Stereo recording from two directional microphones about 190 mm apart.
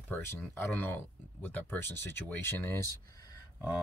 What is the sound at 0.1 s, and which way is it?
Speech, 10° left (ahead or behind).